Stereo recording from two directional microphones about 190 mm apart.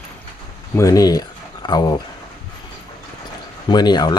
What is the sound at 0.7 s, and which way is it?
Speech, 15° left (ahead or behind).